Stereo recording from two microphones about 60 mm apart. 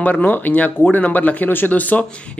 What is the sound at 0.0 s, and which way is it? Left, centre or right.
Speech, left.